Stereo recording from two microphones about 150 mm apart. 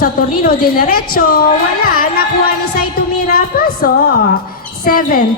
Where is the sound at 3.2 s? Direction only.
80° left.